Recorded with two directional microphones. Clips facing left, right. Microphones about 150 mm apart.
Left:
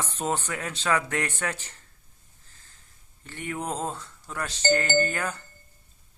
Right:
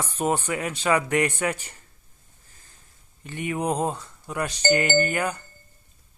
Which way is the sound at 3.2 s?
15° right (ahead or behind).